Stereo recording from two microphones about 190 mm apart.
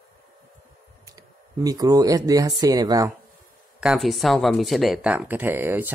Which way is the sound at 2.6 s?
20° right (ahead or behind).